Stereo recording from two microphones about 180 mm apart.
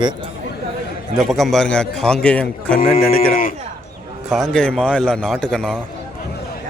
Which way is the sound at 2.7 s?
50° left (ahead or behind).